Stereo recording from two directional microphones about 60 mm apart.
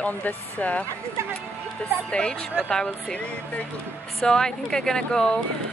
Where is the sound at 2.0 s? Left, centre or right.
Centre.